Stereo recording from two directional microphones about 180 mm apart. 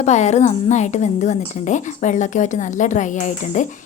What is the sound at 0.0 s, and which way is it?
Speech, 40° left (ahead or behind).